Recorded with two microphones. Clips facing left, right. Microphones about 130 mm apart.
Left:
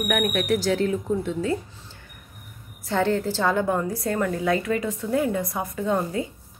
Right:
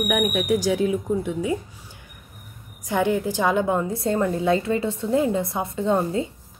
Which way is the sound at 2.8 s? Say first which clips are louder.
Right 1 dB; 15° right (ahead or behind).